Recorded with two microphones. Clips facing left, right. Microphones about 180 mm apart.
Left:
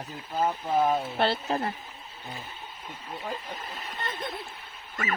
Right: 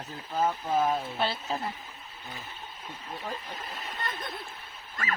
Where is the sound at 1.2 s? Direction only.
65° left (ahead or behind).